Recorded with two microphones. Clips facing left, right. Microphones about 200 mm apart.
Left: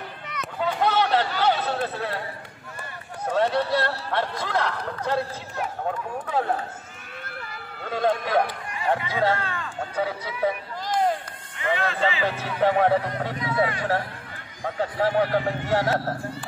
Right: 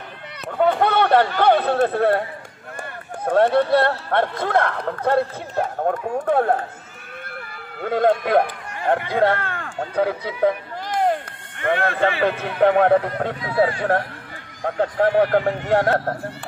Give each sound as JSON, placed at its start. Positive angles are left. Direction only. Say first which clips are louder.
{"t": 0.5, "sound": "a sound", "louder": "right 6 dB", "side_deg": -55}
{"t": 2.8, "sound": "speech", "louder": "right 5 dB", "side_deg": -55}
{"t": 7.8, "sound": "a man's voice", "louder": "right 6 dB", "side_deg": -55}
{"t": 13.4, "sound": "speech", "louder": "right 5 dB", "side_deg": -30}
{"t": 14.6, "sound": "a man's voice", "louder": "right 5 dB", "side_deg": -60}